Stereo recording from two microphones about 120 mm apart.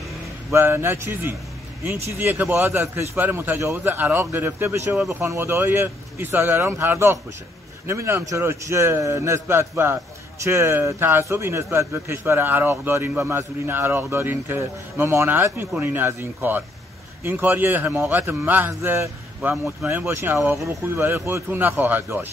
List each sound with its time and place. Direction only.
0.5 s a man's voice: 20° right (ahead or behind)
19.5 s speech: 5° right (ahead or behind)
19.9 s a man's voice: 20° right (ahead or behind)